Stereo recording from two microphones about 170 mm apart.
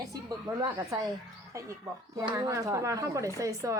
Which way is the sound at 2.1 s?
20° right (ahead or behind).